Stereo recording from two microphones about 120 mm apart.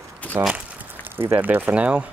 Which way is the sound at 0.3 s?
20° right (ahead or behind).